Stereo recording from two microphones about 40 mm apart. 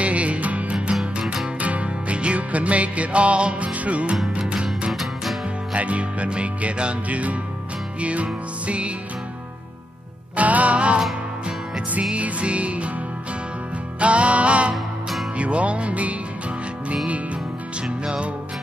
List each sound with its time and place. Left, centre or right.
0.0 s music: right
4.9 s music: centre
5.7 s music: right
10.3 s music: right
13.9 s music: right
17.8 s music: right